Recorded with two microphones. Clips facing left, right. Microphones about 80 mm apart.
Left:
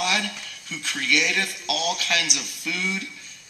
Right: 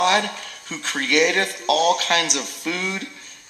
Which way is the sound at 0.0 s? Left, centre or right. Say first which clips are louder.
Right 7 dB; right.